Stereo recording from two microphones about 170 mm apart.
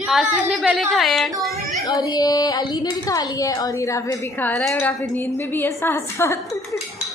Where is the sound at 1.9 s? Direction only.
25° left (ahead or behind).